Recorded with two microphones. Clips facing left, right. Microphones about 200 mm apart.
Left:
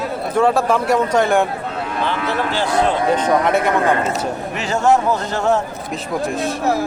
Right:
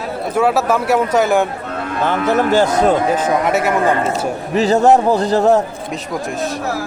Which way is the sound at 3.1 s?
5° right (ahead or behind).